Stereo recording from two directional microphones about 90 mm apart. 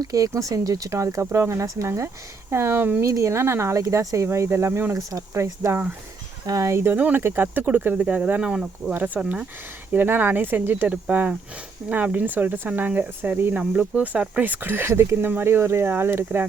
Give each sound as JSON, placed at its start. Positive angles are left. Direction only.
{"t": 0.0, "sound": "speech", "side_deg": -40}